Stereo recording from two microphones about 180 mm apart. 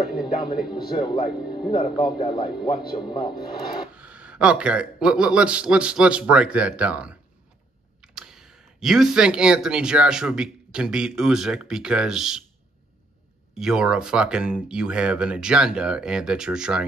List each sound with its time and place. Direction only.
0.1 s speech: 5° right (ahead or behind)
0.7 s speech: 25° left (ahead or behind)
3.9 s speech: 5° right (ahead or behind)
13.6 s speech: 5° right (ahead or behind)